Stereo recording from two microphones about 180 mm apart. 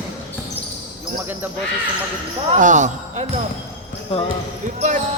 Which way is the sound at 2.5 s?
45° right (ahead or behind).